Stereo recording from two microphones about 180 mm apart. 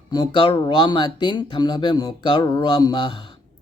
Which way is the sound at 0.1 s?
25° left (ahead or behind).